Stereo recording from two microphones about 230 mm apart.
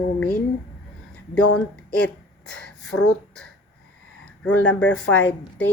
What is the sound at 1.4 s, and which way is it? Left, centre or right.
Speech, left.